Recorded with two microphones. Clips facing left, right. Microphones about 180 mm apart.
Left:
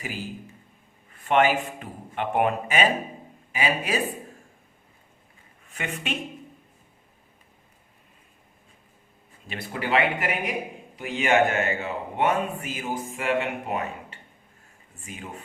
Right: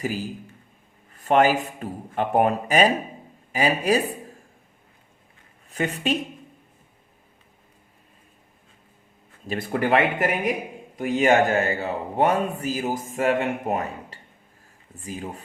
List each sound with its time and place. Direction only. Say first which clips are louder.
1.1 s a man's voice: right 3 dB; 40° right (ahead or behind)
5.6 s speech: right 7 dB; 35° right (ahead or behind)
9.5 s a man's voice: right 5 dB; 50° right (ahead or behind)